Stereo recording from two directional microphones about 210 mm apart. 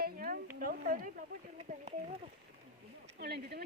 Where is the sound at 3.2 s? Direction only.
50° right (ahead or behind).